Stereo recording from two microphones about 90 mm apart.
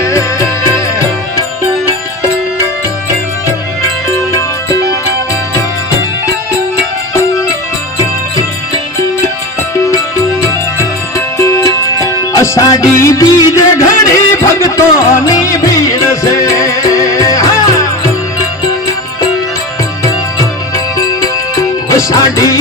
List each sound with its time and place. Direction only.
0.0 s music: 35° left (ahead or behind)
4.1 s music: 35° left (ahead or behind)
7.1 s music: 35° left (ahead or behind)
9.7 s music: 35° left (ahead or behind)
11.3 s music: 35° left (ahead or behind)
21.8 s music: 40° left (ahead or behind)